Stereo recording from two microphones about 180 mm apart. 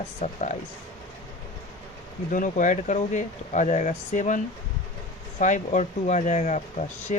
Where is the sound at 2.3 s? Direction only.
45° left (ahead or behind).